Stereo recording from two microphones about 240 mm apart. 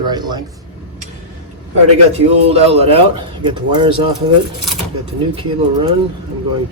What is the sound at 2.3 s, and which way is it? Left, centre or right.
Speech, right.